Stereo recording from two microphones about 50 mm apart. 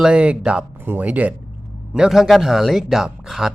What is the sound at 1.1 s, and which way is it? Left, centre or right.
Speech, right.